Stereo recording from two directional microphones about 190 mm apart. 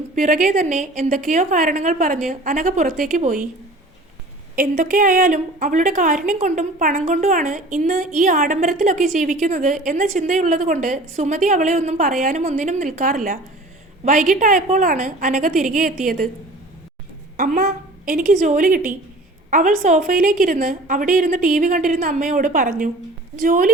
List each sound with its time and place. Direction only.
0.2 s a woman's voice: 45° right (ahead or behind)
4.5 s a woman's voice: 45° right (ahead or behind)
17.3 s a woman's voice: 50° right (ahead or behind)